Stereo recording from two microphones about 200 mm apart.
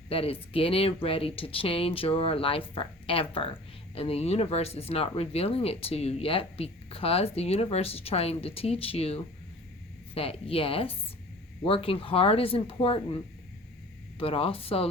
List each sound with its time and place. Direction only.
0.1 s speech: 30° left (ahead or behind)
14.2 s speech: 30° left (ahead or behind)